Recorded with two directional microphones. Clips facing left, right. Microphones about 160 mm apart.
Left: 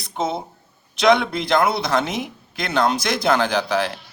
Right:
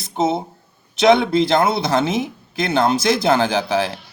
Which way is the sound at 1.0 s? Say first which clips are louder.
Right 4 dB; 30° right (ahead or behind).